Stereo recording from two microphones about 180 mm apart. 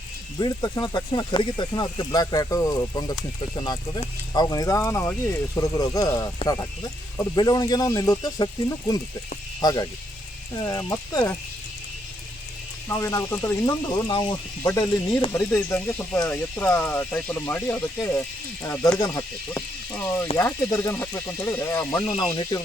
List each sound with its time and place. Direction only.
0.3 s speech: 25° left (ahead or behind)
9.6 s speech: 20° left (ahead or behind)
12.9 s speech: 15° left (ahead or behind)